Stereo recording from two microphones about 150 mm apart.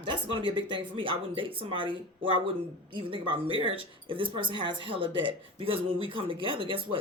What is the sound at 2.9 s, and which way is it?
Speech, 35° right (ahead or behind).